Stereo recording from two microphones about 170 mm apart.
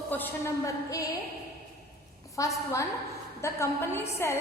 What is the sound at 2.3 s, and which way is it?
A woman's voice, 20° left (ahead or behind).